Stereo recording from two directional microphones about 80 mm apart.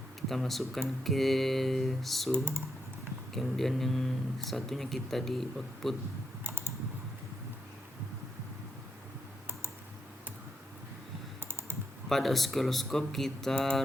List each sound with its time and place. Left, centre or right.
0.2 s speech: centre
2.3 s speech: right
3.3 s speech: centre
6.4 s typing: right
12.0 s speech: centre